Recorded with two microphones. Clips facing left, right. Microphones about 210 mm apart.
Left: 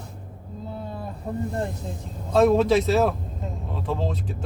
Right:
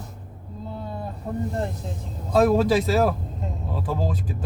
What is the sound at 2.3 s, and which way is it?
A man's voice, centre (ahead or behind).